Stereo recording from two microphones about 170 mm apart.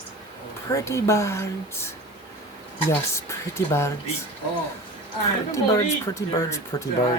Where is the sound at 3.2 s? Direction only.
15° left (ahead or behind).